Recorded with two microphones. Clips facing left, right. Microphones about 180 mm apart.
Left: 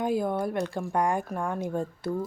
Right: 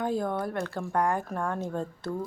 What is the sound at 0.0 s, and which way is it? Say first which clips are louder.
A woman's voice: left 2 dB; 10° left (ahead or behind).